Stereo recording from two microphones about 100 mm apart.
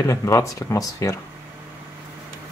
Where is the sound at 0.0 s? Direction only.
30° left (ahead or behind).